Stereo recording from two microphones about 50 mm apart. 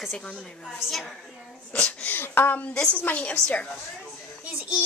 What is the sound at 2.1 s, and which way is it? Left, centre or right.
Female singing, left.